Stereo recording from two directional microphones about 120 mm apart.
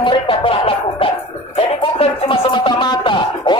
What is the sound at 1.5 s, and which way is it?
Speech, 50° left (ahead or behind).